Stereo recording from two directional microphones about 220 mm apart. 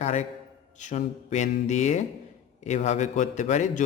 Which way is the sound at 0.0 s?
30° left (ahead or behind).